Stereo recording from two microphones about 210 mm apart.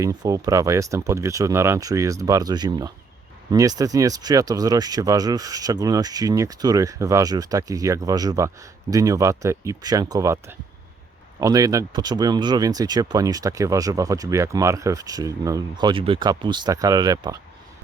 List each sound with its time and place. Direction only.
0.0 s speech: 15° right (ahead or behind)